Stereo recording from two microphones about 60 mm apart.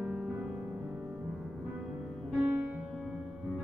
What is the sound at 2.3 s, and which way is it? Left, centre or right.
Music, centre.